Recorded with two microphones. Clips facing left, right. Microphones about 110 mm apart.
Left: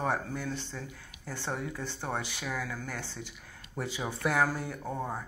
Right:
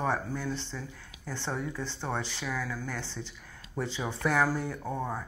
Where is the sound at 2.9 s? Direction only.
15° left (ahead or behind).